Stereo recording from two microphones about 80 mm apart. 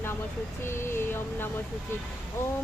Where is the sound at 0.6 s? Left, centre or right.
Left.